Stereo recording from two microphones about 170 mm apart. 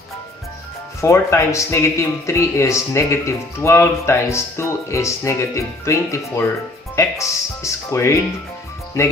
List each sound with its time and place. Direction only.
1.0 s speech: 15° left (ahead or behind)